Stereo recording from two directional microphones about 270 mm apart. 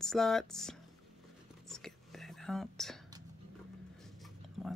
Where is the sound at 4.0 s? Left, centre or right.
Centre.